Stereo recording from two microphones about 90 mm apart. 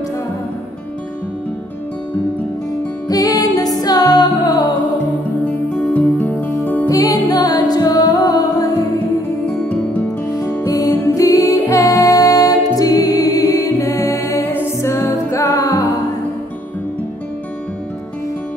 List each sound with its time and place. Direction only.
3.1 s music: 45° left (ahead or behind)
5.9 s music: 20° left (ahead or behind)
6.9 s music: 40° left (ahead or behind)
10.6 s music: 40° left (ahead or behind)